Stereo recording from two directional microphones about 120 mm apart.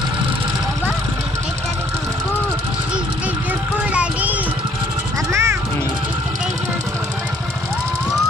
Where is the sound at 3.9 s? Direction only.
10° right (ahead or behind).